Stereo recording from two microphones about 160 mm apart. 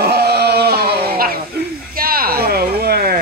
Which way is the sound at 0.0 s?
85° right.